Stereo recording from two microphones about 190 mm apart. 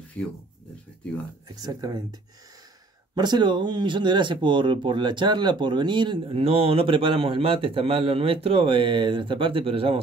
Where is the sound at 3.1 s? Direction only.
25° right (ahead or behind).